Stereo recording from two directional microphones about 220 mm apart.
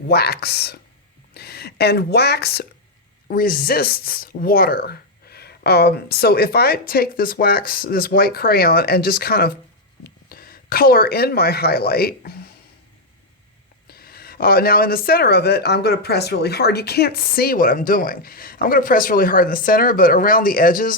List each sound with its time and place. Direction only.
0.1 s speech: 45° left (ahead or behind)
13.8 s speech: 45° left (ahead or behind)